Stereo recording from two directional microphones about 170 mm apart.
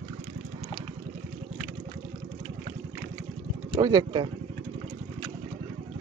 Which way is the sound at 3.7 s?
20° right (ahead or behind).